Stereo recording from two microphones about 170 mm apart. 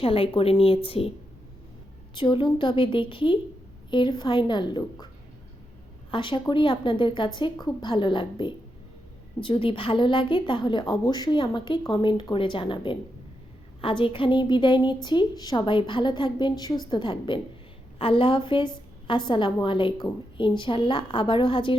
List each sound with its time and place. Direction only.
0.0 s a woman's voice: 35° left (ahead or behind)
2.1 s a woman's voice: 30° left (ahead or behind)
6.1 s a woman's voice: 30° left (ahead or behind)